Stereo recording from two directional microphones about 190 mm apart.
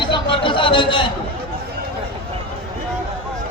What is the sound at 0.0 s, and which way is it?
Chatter, 25° left (ahead or behind).